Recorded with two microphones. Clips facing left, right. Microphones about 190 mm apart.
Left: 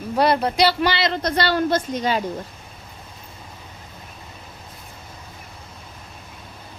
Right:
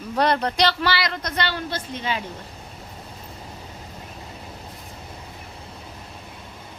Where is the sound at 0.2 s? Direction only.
10° left (ahead or behind); by 2.2 s 40° left (ahead or behind).